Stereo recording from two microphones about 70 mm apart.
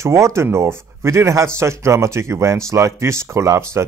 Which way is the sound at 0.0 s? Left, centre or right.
Right.